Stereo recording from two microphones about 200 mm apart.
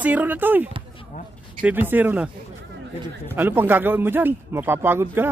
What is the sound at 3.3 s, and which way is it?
A man's voice, 10° right (ahead or behind).